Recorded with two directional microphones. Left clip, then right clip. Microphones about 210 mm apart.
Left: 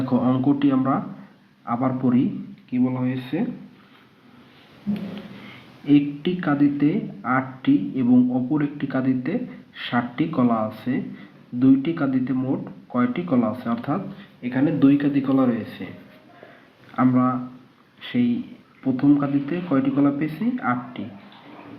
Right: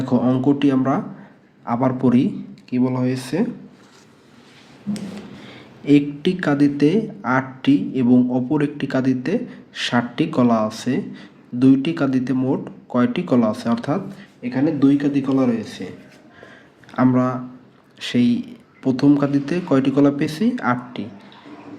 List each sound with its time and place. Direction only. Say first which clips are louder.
0.0 s speech: right 3 dB; 20° right (ahead or behind)
2.6 s speech: right 3 dB; 45° right (ahead or behind)
5.8 s speech: right 3 dB; 30° right (ahead or behind)
14.4 s speech: right 1 dB; 5° right (ahead or behind)
16.9 s speech: right 2 dB; 30° right (ahead or behind)